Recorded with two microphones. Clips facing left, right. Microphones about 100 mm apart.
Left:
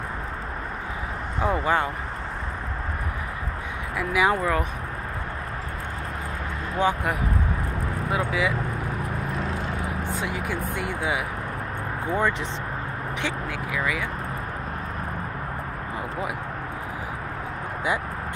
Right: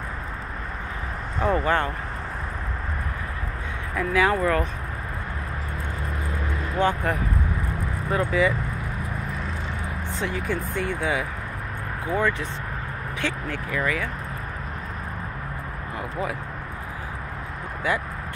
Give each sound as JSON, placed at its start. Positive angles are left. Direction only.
{"t": 1.4, "sound": "speech", "side_deg": 10}
{"t": 3.9, "sound": "speech", "side_deg": 15}
{"t": 6.8, "sound": "speech", "side_deg": 10}
{"t": 10.2, "sound": "speech", "side_deg": 10}
{"t": 13.2, "sound": "speech", "side_deg": 10}